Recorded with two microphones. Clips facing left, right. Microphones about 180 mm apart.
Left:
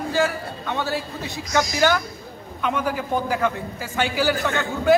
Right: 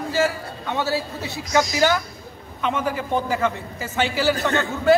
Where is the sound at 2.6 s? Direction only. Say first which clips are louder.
Even; centre (ahead or behind).